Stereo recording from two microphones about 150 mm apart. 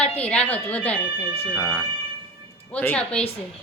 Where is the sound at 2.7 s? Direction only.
10° left (ahead or behind).